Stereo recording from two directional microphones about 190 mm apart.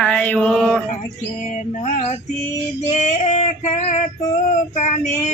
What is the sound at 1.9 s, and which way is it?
Child singing, 35° left (ahead or behind).